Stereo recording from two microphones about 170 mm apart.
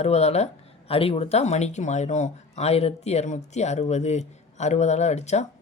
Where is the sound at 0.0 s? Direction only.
40° left (ahead or behind).